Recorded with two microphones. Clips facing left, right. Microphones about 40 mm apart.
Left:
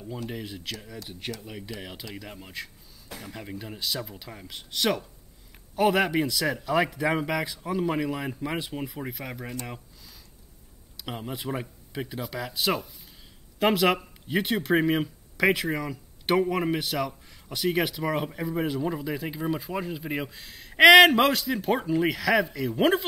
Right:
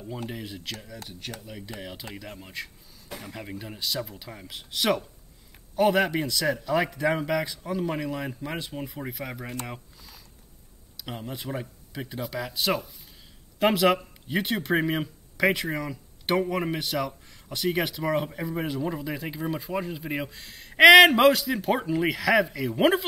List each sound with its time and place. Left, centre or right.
0.3 s speech: centre
1.2 s speech: centre
1.8 s speech: centre
9.7 s a sound: centre
11.0 s speech: centre